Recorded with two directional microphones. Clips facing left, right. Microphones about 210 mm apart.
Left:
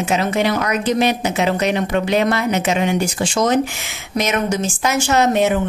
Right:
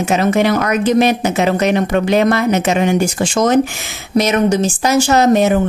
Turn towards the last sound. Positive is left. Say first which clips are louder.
# right 4 dB
turn(degrees=-40)  # may be behind; listen again after turning